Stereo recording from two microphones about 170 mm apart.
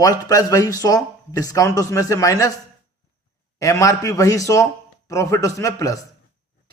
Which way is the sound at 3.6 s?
20° left (ahead or behind).